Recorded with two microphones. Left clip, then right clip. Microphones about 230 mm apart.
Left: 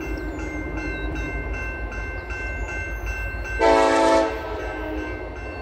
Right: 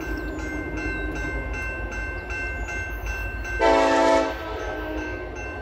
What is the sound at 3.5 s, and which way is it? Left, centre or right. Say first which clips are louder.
Train: left 1 dB; centre.